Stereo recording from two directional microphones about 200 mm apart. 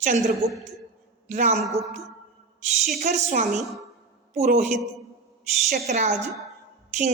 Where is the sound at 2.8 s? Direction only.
50° right (ahead or behind).